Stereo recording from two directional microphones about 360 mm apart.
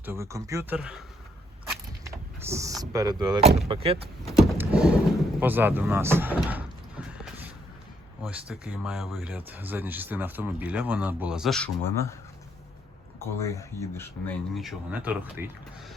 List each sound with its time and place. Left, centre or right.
0.0 s speech: centre
2.0 s speech: centre
4.3 s vehicle: centre
5.4 s door: centre
8.2 s speech: centre
13.1 s speech: centre